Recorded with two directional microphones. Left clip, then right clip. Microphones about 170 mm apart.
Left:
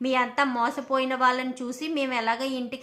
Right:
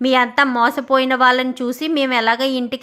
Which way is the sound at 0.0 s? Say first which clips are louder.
Right 9 dB; 40° right (ahead or behind).